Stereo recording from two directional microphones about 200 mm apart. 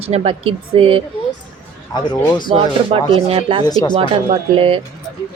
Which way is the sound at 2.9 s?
25° right (ahead or behind).